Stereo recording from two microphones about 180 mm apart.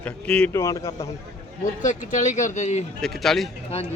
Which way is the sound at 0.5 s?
15° left (ahead or behind).